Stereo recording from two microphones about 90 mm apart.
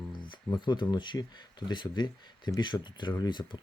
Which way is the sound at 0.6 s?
60° left (ahead or behind).